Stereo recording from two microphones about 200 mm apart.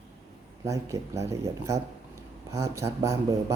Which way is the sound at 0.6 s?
15° right (ahead or behind).